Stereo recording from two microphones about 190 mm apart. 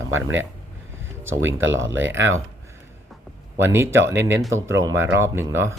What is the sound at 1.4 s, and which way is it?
Speech, 90° right.